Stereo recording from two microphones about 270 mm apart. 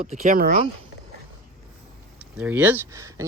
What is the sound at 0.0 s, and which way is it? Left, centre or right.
Speech, right.